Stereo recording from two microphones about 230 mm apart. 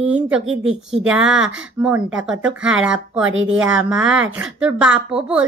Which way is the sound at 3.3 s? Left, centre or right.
Right.